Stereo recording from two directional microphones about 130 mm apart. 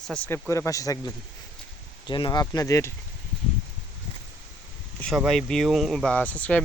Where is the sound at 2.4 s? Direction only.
30° left (ahead or behind).